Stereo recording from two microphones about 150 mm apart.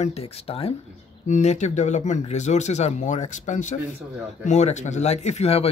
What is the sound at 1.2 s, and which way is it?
Speech, 50° left (ahead or behind).